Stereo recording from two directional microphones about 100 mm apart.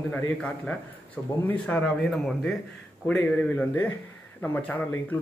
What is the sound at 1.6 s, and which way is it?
A man's voice, 5° left (ahead or behind).